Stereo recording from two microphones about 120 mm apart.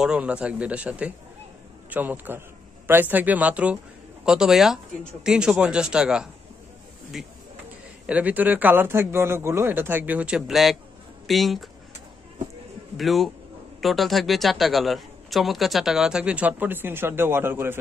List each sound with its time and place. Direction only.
0.0 s a man's voice: 10° right (ahead or behind)
12.9 s a man's voice: centre (ahead or behind); by 17.7 s 20° right (ahead or behind)